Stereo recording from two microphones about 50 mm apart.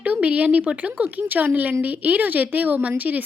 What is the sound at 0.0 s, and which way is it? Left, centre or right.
A woman's voice, right.